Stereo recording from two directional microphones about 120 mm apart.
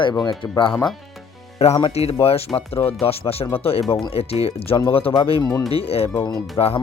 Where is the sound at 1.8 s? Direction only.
60° left (ahead or behind).